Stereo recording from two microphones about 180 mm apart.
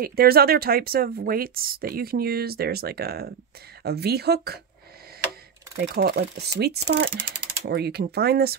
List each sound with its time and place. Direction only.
0.0 s speech: 55° right (ahead or behind)
5.8 s speech: 65° right (ahead or behind)